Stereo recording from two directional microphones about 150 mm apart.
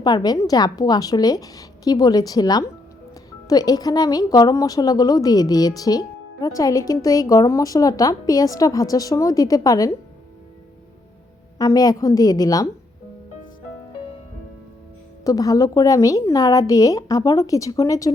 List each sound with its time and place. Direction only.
0.0 s a woman's voice: 25° left (ahead or behind)
11.5 s a woman's voice: 25° left (ahead or behind)
15.2 s a woman's voice: 25° left (ahead or behind)